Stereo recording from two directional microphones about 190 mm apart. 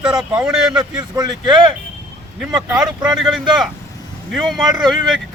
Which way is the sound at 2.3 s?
5° right (ahead or behind).